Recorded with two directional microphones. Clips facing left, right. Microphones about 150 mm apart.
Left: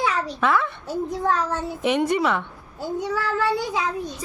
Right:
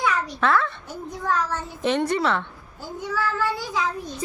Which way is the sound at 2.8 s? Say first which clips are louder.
Left 2 dB; 25° left (ahead or behind).